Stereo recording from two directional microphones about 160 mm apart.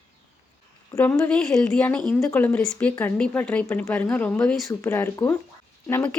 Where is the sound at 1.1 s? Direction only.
5° left (ahead or behind).